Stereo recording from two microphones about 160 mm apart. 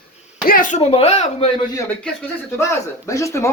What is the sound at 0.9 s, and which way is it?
Speech, 40° left (ahead or behind).